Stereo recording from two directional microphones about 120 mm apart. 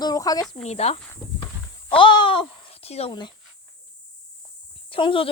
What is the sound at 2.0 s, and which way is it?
Speech, 45° left (ahead or behind).